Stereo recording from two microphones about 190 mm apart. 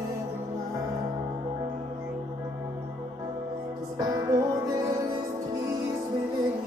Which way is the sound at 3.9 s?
15° right (ahead or behind).